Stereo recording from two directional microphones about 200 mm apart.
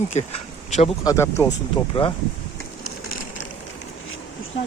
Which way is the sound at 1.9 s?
25° left (ahead or behind).